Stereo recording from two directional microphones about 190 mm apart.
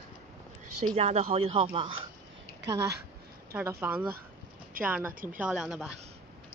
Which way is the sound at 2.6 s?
60° right (ahead or behind).